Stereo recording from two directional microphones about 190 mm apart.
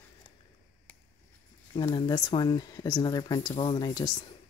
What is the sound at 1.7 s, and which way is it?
Speech, 25° left (ahead or behind).